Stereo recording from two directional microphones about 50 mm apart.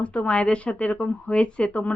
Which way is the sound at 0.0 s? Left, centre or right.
Left.